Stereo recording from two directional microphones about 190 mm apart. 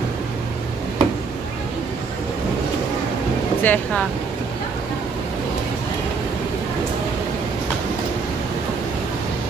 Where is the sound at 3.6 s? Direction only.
10° left (ahead or behind).